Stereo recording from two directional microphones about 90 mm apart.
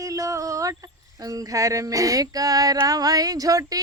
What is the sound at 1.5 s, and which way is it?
Female singing, 40° right (ahead or behind).